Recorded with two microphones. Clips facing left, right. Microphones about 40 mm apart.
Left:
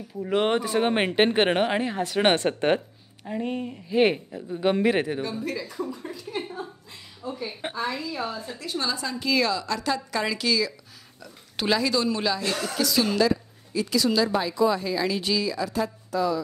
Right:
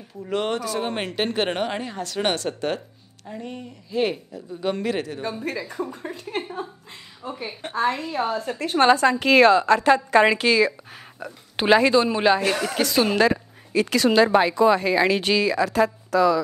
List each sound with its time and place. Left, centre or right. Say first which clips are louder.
0.2 s speech: left 2 dB; centre
5.2 s a woman's voice: right 2 dB; right
7.7 s a woman's voice: right 9 dB; right